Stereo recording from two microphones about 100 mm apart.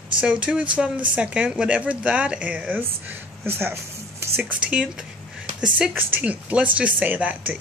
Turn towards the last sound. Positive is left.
turn(degrees=-15)  # may be behind; listen again after turning